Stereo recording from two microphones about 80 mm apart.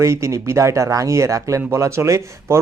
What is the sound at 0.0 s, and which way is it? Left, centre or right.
Speech, right.